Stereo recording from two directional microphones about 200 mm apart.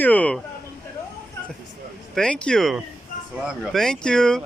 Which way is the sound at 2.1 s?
5° left (ahead or behind).